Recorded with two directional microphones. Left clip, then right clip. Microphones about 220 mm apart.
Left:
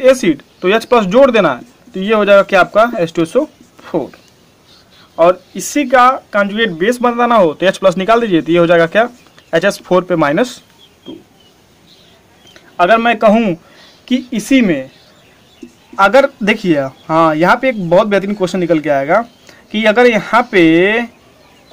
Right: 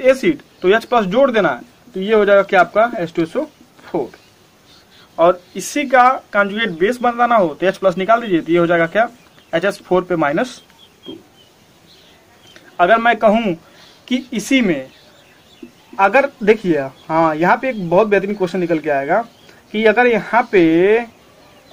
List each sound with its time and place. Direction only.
0.0 s speech: 40° left (ahead or behind)
5.1 s speech: 35° left (ahead or behind)
12.5 s a man's voice: 35° left (ahead or behind)
16.0 s speech: 45° left (ahead or behind)